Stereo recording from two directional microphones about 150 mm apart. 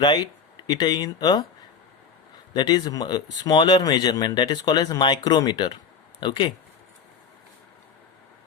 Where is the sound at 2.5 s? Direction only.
25° left (ahead or behind).